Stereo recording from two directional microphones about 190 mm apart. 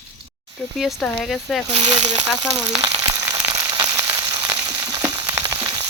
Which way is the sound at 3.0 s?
20° right (ahead or behind).